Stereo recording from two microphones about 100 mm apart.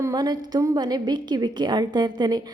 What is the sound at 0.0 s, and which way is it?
A woman's voice, 40° right (ahead or behind).